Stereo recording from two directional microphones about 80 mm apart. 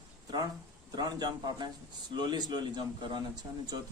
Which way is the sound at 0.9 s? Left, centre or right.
Right.